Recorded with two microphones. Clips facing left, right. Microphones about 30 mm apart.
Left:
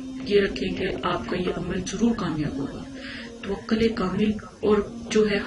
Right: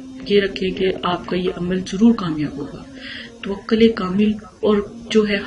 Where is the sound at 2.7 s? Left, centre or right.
Right.